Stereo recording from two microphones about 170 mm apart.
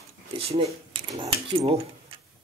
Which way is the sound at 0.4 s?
35° right (ahead or behind).